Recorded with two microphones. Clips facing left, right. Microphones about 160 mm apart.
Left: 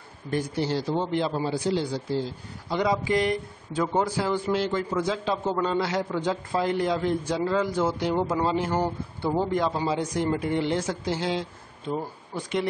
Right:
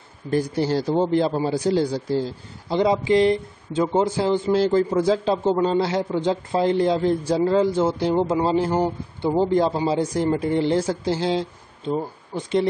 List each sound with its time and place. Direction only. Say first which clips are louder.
0.3 s speech: right 5 dB; 40° right (ahead or behind)
2.7 s speech: right 6 dB; 25° right (ahead or behind)
8.7 s speech: right 4 dB; 15° right (ahead or behind)
9.4 s speech: right 7 dB; 30° right (ahead or behind)